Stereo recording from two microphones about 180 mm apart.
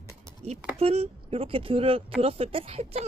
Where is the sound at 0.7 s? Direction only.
35° right (ahead or behind).